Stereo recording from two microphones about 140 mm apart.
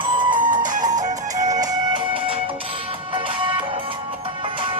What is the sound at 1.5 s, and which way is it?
Music, 25° right (ahead or behind).